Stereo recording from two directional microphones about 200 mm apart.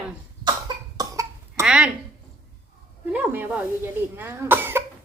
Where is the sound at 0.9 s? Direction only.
15° right (ahead or behind).